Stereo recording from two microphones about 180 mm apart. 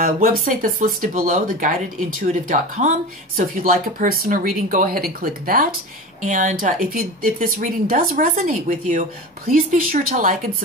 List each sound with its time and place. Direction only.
0.0 s speech: 50° right (ahead or behind)